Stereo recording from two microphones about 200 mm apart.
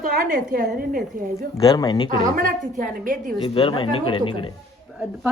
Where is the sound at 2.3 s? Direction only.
45° right (ahead or behind).